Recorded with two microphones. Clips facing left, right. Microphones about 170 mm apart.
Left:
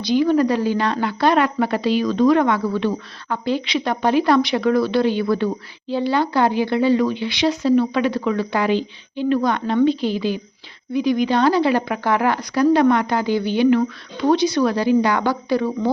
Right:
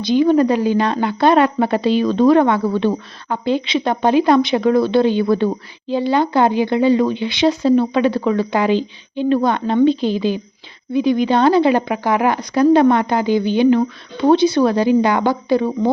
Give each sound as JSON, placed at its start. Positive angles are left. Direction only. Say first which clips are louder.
{"t": 0.0, "sound": "a woman's voice", "louder": "right 3 dB", "side_deg": -20}